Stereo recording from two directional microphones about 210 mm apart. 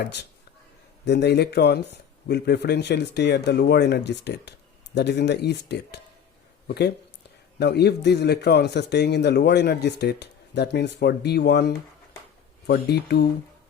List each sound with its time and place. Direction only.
1.0 s speech: 55° left (ahead or behind)